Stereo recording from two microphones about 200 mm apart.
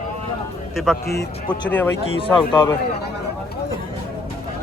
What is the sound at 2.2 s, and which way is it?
Speech, 25° left (ahead or behind).